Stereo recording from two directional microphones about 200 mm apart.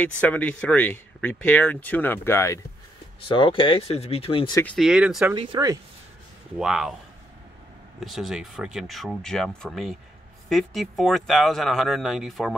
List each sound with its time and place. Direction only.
0.0 s speech: 5° left (ahead or behind)
3.3 s speech: 25° left (ahead or behind)
4.6 s speech: 5° left (ahead or behind)
5.3 s speech: 25° right (ahead or behind)
6.6 s speech: 5° right (ahead or behind)
8.0 s speech: centre (ahead or behind)